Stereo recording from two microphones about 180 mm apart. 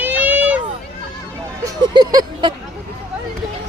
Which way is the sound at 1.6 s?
25° right (ahead or behind).